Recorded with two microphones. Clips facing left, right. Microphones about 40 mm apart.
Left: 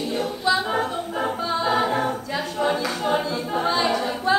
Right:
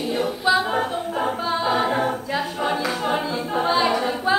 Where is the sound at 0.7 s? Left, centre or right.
Centre.